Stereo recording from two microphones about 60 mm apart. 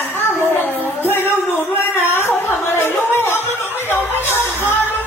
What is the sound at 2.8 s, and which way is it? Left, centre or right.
Music, left.